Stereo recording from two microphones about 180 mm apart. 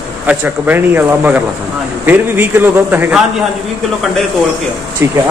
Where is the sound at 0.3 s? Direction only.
10° right (ahead or behind).